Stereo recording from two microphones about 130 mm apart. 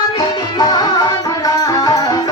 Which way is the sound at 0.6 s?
35° left (ahead or behind).